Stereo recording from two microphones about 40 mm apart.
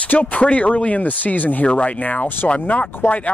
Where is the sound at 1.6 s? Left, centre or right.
Left.